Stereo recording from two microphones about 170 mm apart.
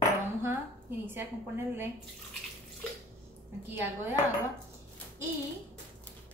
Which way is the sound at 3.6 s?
10° right (ahead or behind).